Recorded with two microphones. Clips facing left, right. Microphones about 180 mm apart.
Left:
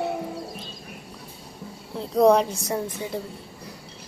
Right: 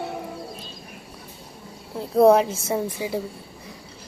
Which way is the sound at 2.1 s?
5° right (ahead or behind).